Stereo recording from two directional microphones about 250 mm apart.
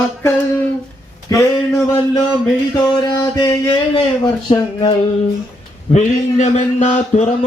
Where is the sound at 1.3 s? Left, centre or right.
Centre.